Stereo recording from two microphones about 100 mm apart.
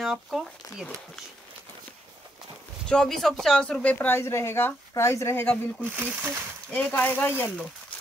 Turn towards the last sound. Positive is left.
turn(degrees=20)  # may be behind; listen again after turning